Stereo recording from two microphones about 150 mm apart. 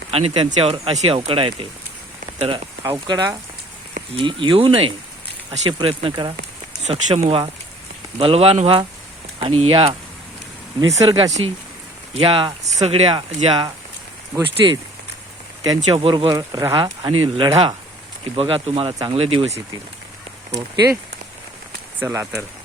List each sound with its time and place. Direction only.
0.1 s speech: 40° right (ahead or behind)
2.8 s speech: 25° right (ahead or behind)
10.8 s speech: 20° right (ahead or behind)
11.3 s speech: 50° right (ahead or behind)
21.9 s speech: 15° right (ahead or behind)